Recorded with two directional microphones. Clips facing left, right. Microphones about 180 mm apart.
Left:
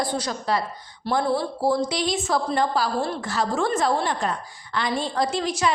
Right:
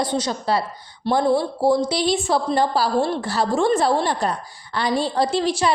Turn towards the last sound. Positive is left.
turn(degrees=-30)  # may be behind; listen again after turning